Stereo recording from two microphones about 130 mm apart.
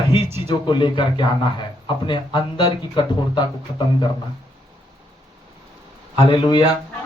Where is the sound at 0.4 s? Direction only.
40° left (ahead or behind).